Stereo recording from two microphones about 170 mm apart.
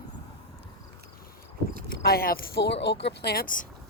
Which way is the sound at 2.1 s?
60° left (ahead or behind).